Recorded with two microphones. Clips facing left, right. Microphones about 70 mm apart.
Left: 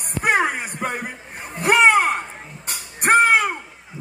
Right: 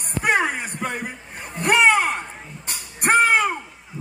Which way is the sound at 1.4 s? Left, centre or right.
Centre.